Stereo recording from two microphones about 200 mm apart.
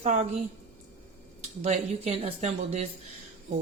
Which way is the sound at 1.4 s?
30° right (ahead or behind).